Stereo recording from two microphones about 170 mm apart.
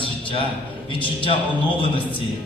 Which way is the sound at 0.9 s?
30° left (ahead or behind).